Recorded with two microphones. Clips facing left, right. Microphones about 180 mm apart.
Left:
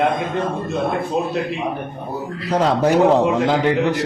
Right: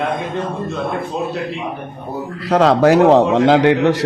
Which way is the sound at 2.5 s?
90° right.